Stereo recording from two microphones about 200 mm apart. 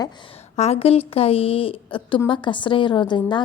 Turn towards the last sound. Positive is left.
turn(degrees=25)  # may be behind; listen again after turning